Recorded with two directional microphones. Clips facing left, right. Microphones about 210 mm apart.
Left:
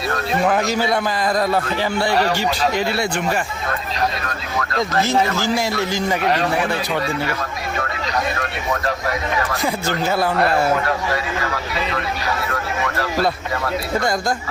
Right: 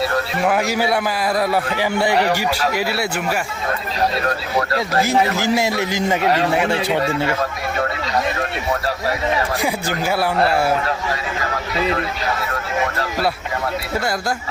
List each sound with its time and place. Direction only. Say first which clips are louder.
0.4 s speech: even; 10° right (ahead or behind)
5.0 s a man's voice: right 1 dB; 15° right (ahead or behind)
10.1 s speech: right 1 dB; 10° right (ahead or behind)